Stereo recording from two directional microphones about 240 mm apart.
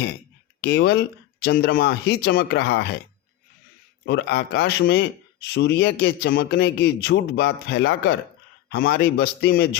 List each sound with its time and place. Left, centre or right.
0.6 s a man's voice: left
4.0 s a man's voice: left